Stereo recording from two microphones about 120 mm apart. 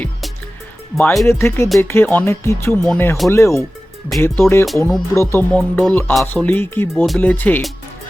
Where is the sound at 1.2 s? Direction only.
20° left (ahead or behind).